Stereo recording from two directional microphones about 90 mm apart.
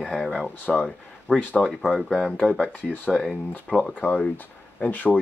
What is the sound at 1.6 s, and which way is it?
Speech, 5° right (ahead or behind).